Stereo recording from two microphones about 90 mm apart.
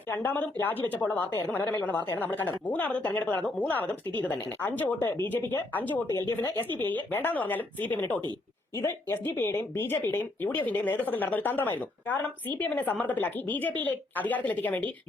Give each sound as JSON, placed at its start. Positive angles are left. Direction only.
{"t": 0.1, "sound": "speech", "side_deg": 20}